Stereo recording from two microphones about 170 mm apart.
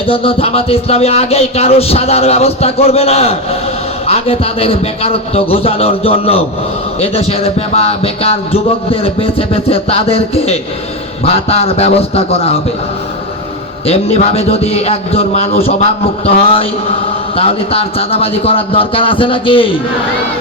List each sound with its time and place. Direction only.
0.0 s speech: 35° left (ahead or behind)
13.8 s speech: 35° left (ahead or behind)